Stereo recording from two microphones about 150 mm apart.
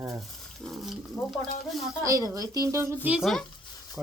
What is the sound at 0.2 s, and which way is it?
Speech, centre (ahead or behind).